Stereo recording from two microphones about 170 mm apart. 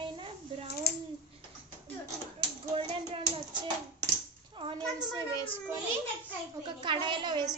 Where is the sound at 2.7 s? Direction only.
30° right (ahead or behind).